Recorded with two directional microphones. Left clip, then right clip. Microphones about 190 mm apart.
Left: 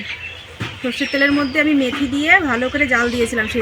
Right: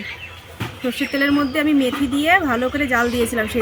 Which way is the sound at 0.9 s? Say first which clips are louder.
Left 3 dB; centre (ahead or behind).